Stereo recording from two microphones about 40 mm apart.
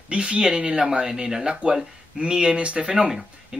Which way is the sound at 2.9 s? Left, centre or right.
Centre.